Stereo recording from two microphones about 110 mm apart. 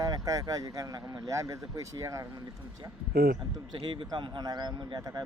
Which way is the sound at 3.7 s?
50° right (ahead or behind).